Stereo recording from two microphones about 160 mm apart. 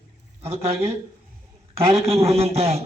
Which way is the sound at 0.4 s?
40° right (ahead or behind).